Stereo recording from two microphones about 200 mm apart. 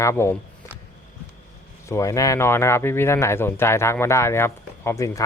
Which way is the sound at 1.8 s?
15° left (ahead or behind).